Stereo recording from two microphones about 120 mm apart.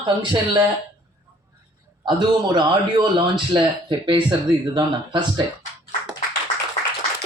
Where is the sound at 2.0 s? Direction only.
40° right (ahead or behind).